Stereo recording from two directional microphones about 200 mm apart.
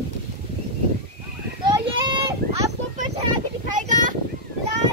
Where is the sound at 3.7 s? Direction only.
40° right (ahead or behind).